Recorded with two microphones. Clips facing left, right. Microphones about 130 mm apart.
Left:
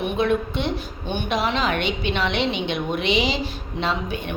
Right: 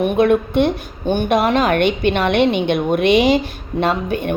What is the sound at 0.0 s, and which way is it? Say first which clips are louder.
A woman's voice: right 7 dB; 55° right (ahead or behind).